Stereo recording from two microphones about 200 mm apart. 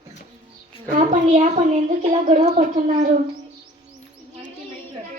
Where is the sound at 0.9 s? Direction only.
40° right (ahead or behind).